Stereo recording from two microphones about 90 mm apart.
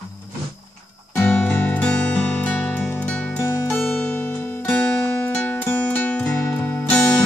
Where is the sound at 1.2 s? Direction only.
20° left (ahead or behind).